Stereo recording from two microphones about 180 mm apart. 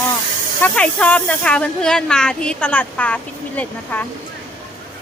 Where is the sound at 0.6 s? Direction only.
10° left (ahead or behind).